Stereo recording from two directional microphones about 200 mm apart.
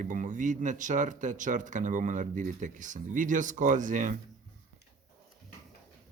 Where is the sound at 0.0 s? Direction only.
40° right (ahead or behind).